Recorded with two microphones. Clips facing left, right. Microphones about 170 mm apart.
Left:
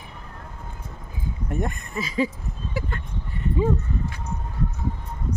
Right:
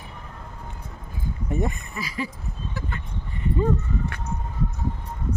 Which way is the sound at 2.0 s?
20° left (ahead or behind).